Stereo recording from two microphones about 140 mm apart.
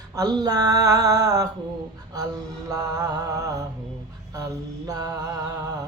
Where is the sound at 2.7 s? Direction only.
25° right (ahead or behind).